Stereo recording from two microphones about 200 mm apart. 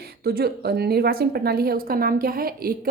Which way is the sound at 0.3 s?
50° right (ahead or behind).